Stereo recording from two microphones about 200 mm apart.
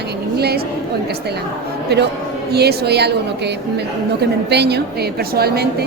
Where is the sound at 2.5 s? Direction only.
55° right (ahead or behind).